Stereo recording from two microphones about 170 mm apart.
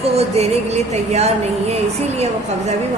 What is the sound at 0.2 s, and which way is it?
Music, 40° right (ahead or behind).